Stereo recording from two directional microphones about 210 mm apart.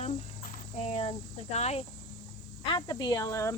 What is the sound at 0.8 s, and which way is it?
Speech, 30° left (ahead or behind).